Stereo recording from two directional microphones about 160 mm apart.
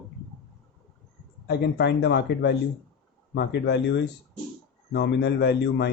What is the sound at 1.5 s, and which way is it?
Speech, 90° left.